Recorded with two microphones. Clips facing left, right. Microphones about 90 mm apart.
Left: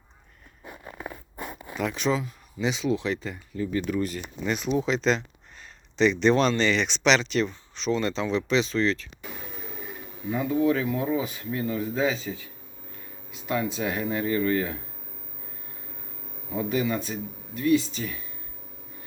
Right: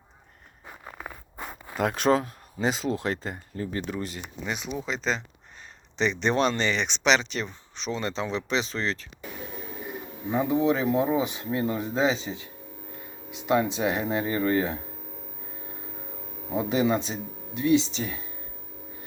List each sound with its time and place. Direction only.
1.8 s speech: 55° right (ahead or behind); by 5.2 s 5° right (ahead or behind)
6.0 s speech: 20° right (ahead or behind)
10.2 s speech: 20° right (ahead or behind)
13.7 s speech: 20° right (ahead or behind)
16.5 s speech: 25° right (ahead or behind)